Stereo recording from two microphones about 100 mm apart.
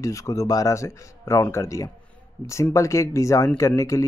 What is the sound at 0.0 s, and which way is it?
Speech, 30° left (ahead or behind).